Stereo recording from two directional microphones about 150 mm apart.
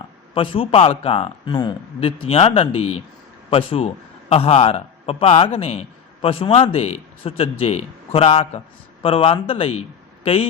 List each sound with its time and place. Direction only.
0.3 s a man's voice: 40° left (ahead or behind)